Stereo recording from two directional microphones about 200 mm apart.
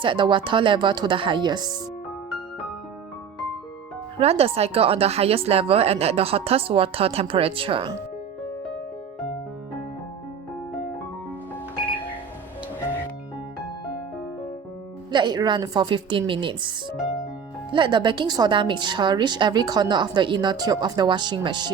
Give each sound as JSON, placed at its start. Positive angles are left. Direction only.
{"t": 0.0, "sound": "a woman's voice", "side_deg": -25}
{"t": 4.2, "sound": "a woman's voice", "side_deg": -30}
{"t": 15.1, "sound": "a woman's voice", "side_deg": -20}
{"t": 17.7, "sound": "a woman's voice", "side_deg": -25}